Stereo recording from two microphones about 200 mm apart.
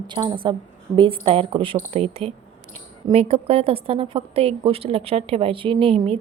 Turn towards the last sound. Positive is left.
turn(degrees=-30)  # may be behind; listen again after turning